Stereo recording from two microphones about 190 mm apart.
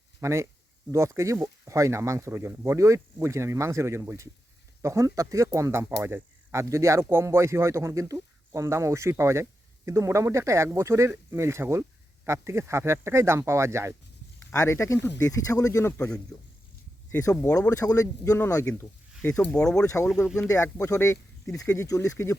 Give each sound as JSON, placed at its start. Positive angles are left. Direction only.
{"t": 0.2, "sound": "speech", "side_deg": -15}
{"t": 14.5, "sound": "speech", "side_deg": 15}
{"t": 19.8, "sound": "speech", "side_deg": 15}